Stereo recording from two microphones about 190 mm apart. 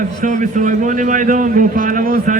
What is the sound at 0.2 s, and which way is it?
A man's voice, 40° right (ahead or behind).